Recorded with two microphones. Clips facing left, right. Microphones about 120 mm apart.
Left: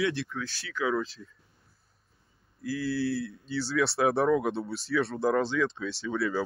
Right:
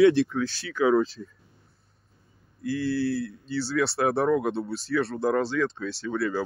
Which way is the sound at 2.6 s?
Centre (ahead or behind).